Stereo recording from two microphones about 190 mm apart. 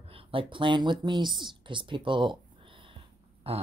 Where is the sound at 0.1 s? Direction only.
30° right (ahead or behind).